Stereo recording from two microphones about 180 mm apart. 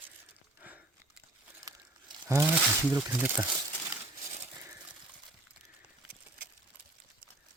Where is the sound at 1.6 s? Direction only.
20° right (ahead or behind).